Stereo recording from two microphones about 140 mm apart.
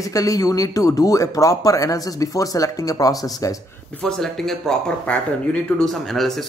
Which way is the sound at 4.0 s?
5° left (ahead or behind).